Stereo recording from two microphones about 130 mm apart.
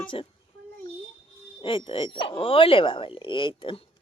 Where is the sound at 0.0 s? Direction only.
40° left (ahead or behind).